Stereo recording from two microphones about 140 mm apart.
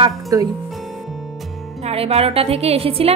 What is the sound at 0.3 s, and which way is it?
Speech, 25° right (ahead or behind).